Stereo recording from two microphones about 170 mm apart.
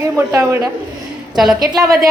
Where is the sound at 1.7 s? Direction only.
20° right (ahead or behind).